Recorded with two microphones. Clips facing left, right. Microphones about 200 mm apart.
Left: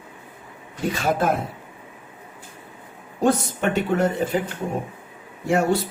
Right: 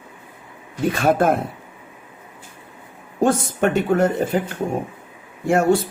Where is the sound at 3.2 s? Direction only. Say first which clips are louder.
Right 2 dB; 50° right (ahead or behind).